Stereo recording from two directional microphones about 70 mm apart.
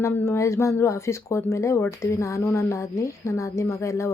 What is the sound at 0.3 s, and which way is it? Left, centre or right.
A woman's voice, left.